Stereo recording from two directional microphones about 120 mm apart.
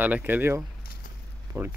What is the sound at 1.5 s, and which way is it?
Speech, 30° right (ahead or behind).